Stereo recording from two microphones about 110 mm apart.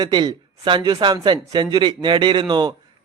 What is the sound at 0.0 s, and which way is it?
Speech, 40° right (ahead or behind).